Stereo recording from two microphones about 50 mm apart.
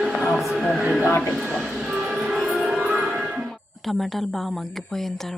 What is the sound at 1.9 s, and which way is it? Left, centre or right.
Music, centre.